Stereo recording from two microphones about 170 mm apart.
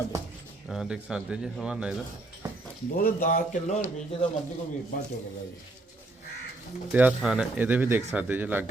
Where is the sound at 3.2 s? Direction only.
50° left (ahead or behind).